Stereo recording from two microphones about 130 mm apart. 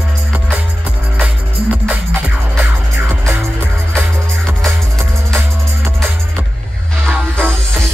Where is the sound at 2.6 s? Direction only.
15° right (ahead or behind).